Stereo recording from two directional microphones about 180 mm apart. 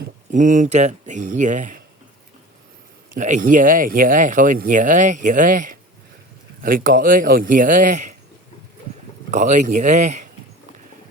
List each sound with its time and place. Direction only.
0.3 s speech: 45° right (ahead or behind)
3.2 s speech: 45° right (ahead or behind)
9.3 s speech: 45° right (ahead or behind)